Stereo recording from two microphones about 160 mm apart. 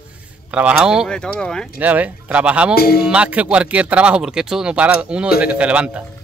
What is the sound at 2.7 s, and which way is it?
Speech, 75° left (ahead or behind).